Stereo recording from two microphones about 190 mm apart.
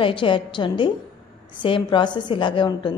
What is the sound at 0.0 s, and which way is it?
A woman's voice, 25° left (ahead or behind).